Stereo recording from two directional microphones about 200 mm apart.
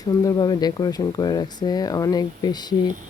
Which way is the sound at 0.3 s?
20° left (ahead or behind).